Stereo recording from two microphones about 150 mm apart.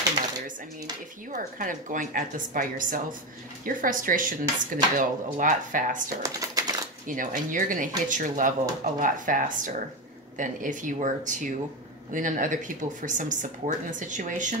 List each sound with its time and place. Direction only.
1.3 s speech: 60° right (ahead or behind)
6.2 s crumpling: 25° right (ahead or behind)
7.1 s speech: 60° right (ahead or behind)